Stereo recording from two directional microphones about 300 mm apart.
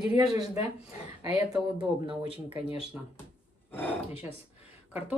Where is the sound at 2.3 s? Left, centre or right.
Centre.